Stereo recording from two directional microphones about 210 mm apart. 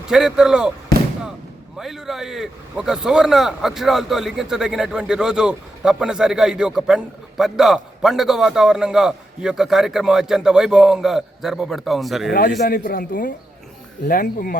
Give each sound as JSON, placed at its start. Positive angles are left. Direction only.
{"t": 0.1, "sound": "a man's voice", "side_deg": 0}
{"t": 1.8, "sound": "a man's voice", "side_deg": 0}
{"t": 12.6, "sound": "a man's voice", "side_deg": 40}